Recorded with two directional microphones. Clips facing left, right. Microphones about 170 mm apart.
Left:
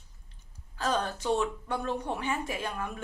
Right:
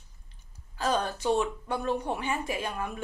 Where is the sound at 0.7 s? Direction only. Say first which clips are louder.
Right 2 dB; 10° right (ahead or behind).